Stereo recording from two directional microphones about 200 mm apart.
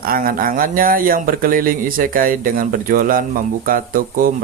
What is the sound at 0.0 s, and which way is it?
Speech, 45° right (ahead or behind).